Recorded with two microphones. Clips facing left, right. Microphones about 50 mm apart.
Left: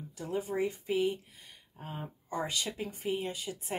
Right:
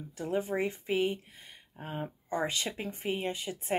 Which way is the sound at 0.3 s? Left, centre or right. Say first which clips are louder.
Right 1 dB; right.